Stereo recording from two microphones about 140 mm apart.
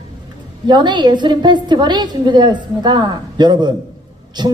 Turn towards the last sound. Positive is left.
turn(degrees=-30)  # may be behind; listen again after turning